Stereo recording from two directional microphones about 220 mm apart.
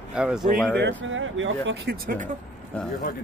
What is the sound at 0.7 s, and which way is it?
Speech, 55° right (ahead or behind).